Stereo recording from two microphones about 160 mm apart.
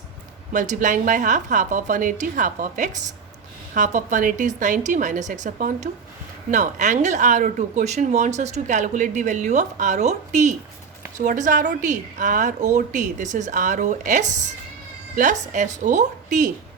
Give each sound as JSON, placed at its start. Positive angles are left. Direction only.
{"t": 0.5, "sound": "speech", "side_deg": -50}